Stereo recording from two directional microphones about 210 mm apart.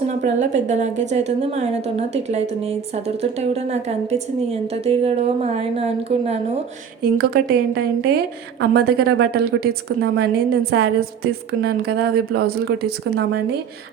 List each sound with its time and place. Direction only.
0.1 s a woman's voice: 35° right (ahead or behind)
7.0 s a woman's voice: 45° right (ahead or behind)